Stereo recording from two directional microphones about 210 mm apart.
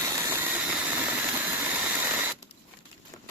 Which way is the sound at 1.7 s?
10° right (ahead or behind).